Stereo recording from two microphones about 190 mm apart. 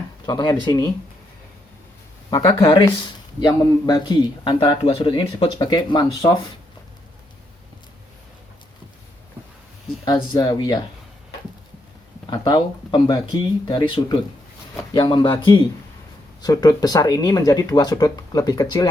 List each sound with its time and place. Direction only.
0.3 s speech: 20° left (ahead or behind)
2.3 s speech: 25° left (ahead or behind)
10.3 s speech: 20° left (ahead or behind)
12.3 s speech: 20° left (ahead or behind)